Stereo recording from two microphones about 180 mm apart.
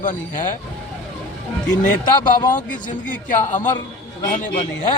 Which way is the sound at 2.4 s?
45° left (ahead or behind).